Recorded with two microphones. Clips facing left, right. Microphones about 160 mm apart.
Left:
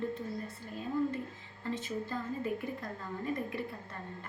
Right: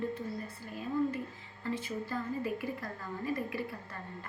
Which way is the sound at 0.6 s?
25° left (ahead or behind).